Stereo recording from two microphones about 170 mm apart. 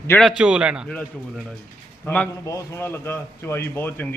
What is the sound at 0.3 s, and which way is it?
Speech, 5° right (ahead or behind).